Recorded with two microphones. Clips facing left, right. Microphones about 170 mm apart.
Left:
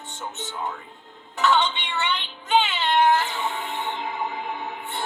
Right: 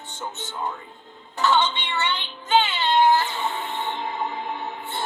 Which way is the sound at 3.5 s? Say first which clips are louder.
Right 1 dB; 20° left (ahead or behind).